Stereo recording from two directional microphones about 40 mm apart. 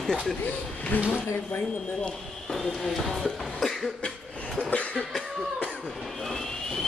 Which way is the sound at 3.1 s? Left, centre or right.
Centre.